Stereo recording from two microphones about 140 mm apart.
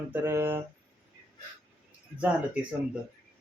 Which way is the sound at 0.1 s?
15° right (ahead or behind).